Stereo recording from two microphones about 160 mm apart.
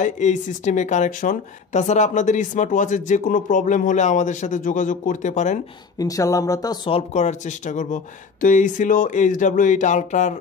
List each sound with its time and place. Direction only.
0.0 s speech: 50° left (ahead or behind)
5.9 s speech: 20° left (ahead or behind); by 10.3 s 50° left (ahead or behind)